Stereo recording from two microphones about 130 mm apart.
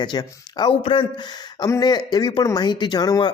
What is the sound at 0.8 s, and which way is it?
Speech, 45° left (ahead or behind).